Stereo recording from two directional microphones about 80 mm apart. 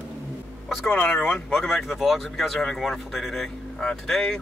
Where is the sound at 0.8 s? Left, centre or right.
Left.